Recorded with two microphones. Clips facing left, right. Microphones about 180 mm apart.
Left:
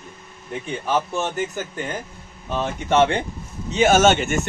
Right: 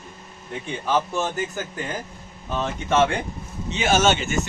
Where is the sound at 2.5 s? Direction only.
5° left (ahead or behind).